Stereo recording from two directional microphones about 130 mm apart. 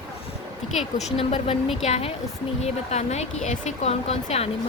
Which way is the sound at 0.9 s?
60° left (ahead or behind).